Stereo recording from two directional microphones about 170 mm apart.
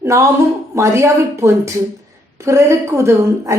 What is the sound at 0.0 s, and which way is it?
A woman's voice, 15° right (ahead or behind).